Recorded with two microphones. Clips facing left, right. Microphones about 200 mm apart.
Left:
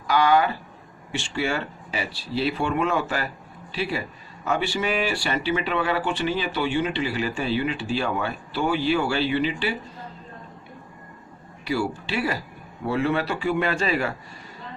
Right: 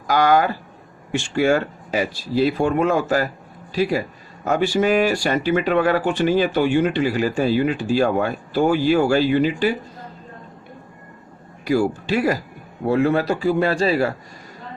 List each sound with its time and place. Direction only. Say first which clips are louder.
0.1 s speech: right 3 dB; 45° right (ahead or behind)
11.6 s a man's voice: right 7 dB; 45° right (ahead or behind)